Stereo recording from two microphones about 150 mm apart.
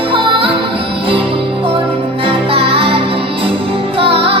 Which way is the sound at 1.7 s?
35° right (ahead or behind).